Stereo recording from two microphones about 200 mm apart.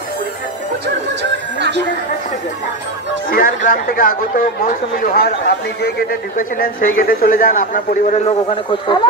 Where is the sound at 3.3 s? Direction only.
45° left (ahead or behind).